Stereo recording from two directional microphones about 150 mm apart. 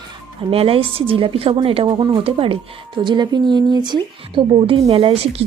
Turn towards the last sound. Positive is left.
turn(degrees=-40)  # may be behind; listen again after turning